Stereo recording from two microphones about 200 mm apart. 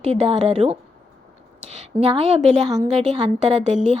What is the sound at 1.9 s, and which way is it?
A woman's voice, 30° right (ahead or behind).